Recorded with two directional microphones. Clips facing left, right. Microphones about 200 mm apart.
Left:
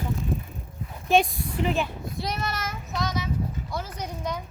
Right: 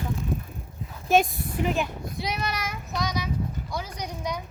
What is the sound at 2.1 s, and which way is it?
Child singing, centre (ahead or behind).